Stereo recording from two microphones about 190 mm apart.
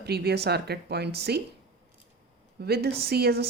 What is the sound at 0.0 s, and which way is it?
A woman's voice, 60° right (ahead or behind).